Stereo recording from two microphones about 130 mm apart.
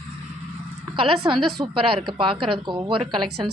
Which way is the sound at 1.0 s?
40° right (ahead or behind).